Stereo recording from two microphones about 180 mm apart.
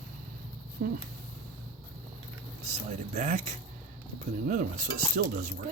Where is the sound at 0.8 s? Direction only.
60° right (ahead or behind).